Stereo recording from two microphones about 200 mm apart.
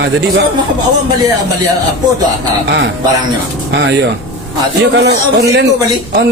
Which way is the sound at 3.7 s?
65° right (ahead or behind).